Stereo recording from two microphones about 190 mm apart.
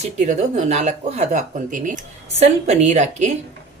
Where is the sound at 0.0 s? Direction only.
40° right (ahead or behind).